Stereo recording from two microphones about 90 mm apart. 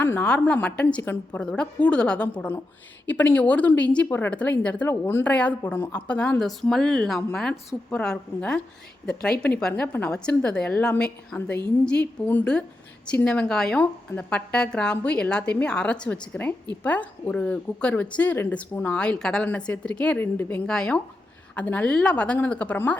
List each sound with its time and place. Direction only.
0.2 s speech: 10° left (ahead or behind)
5.3 s speech: 15° left (ahead or behind)
9.8 s speech: 20° left (ahead or behind)
20.7 s speech: 10° left (ahead or behind)